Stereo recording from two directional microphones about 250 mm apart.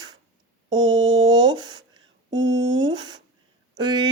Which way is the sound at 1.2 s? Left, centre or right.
Centre.